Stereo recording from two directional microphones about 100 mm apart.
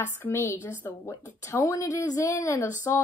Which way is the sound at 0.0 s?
25° left (ahead or behind).